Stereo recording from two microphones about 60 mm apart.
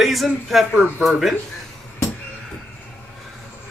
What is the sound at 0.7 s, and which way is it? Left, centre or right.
Speech, right.